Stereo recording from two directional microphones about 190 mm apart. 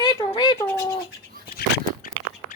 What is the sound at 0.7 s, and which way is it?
Bird, 15° left (ahead or behind).